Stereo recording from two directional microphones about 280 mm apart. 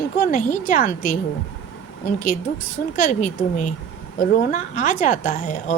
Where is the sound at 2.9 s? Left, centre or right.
Left.